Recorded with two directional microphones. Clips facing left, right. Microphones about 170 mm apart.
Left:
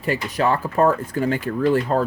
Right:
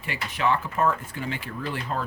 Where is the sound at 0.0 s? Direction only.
40° left (ahead or behind).